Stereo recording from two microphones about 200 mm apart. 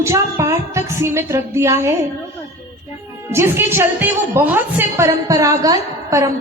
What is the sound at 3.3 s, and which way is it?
A woman's voice, 10° right (ahead or behind).